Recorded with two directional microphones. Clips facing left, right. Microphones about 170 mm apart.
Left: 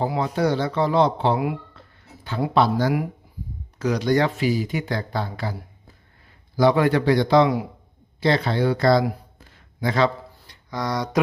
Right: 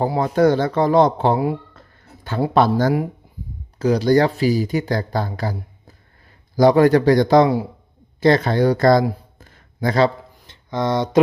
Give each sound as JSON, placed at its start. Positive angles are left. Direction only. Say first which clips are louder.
{"t": 0.0, "sound": "a man's voice", "louder": "right 6 dB", "side_deg": -45}
{"t": 2.6, "sound": "a man's voice", "louder": "right 3 dB", "side_deg": -45}
{"t": 3.8, "sound": "speech", "louder": "right 5 dB", "side_deg": -30}
{"t": 6.6, "sound": "speech", "louder": "right 5 dB", "side_deg": -40}
{"t": 7.4, "sound": "a man's voice", "louder": "right 3 dB", "side_deg": -30}
{"t": 8.2, "sound": "a man's voice", "louder": "right 5 dB", "side_deg": -45}
{"t": 9.4, "sound": "a sound", "louder": "right 4 dB", "side_deg": -40}
{"t": 10.4, "sound": "a sound", "louder": "right 6 dB", "side_deg": -25}